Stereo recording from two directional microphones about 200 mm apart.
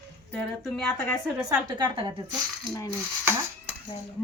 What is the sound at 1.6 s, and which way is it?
Speech, 25° right (ahead or behind).